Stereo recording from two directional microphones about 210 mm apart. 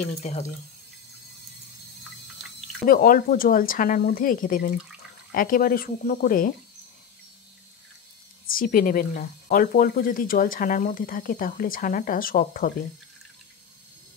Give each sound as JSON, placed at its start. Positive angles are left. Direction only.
{"t": 0.0, "sound": "speech", "side_deg": 30}
{"t": 2.9, "sound": "speech", "side_deg": 40}
{"t": 8.5, "sound": "speech", "side_deg": 40}